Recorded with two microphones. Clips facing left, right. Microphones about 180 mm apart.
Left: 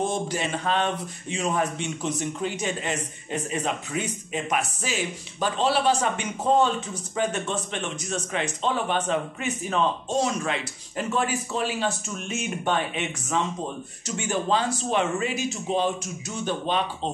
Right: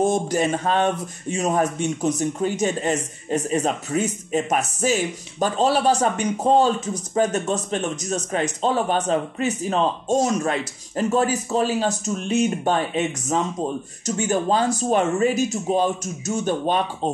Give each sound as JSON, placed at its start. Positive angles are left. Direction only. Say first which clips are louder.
{"t": 0.0, "sound": "speech", "louder": "right 7 dB", "side_deg": -45}